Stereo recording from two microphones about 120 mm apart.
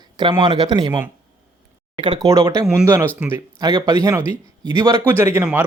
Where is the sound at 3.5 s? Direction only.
35° right (ahead or behind).